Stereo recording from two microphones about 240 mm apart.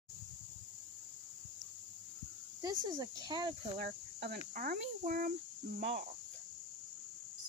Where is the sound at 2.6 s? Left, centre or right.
Centre.